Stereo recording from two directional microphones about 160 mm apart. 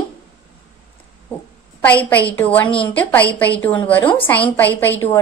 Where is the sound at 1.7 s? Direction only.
10° left (ahead or behind).